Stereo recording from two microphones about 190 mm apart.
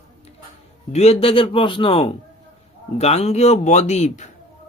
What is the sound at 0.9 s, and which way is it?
A man's voice, 30° left (ahead or behind).